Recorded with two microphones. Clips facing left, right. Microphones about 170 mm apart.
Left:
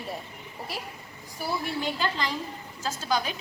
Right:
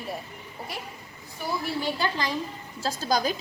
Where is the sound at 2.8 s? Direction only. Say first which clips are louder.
Right 3 dB; 35° right (ahead or behind).